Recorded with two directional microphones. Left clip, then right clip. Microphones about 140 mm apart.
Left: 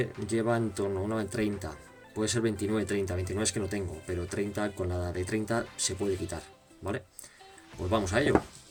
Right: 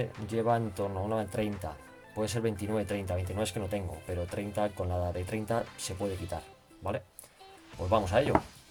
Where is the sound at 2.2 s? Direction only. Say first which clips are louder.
Left 3 dB; 30° right (ahead or behind).